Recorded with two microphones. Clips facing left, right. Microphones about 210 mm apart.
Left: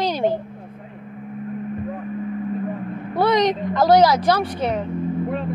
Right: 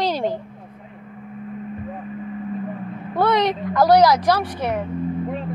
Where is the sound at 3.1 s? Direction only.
15° left (ahead or behind).